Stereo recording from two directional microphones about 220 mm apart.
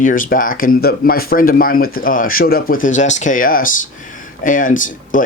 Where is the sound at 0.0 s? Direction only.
40° left (ahead or behind).